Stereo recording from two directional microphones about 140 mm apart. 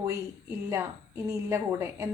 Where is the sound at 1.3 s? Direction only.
20° right (ahead or behind).